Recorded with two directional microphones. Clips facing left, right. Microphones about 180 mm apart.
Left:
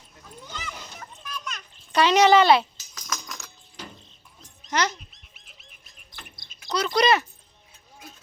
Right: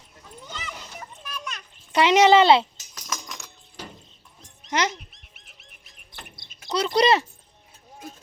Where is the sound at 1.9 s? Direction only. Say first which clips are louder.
Right 1 dB; 20° right (ahead or behind).